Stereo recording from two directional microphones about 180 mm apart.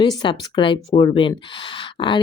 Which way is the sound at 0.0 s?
25° left (ahead or behind).